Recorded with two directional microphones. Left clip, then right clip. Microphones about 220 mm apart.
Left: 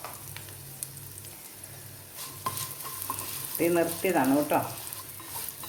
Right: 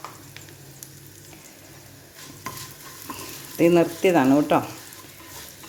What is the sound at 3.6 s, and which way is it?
Speech, 50° right (ahead or behind).